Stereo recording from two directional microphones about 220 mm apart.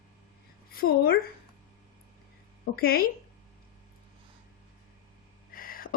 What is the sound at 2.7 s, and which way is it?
Speech, 45° left (ahead or behind).